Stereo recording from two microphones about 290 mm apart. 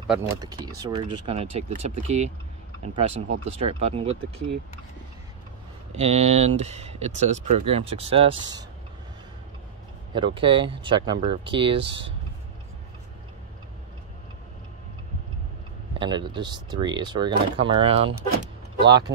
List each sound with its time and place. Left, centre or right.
0.1 s speech: centre
5.9 s speech: right
10.1 s speech: centre
16.0 s speech: centre
19.1 s speech: right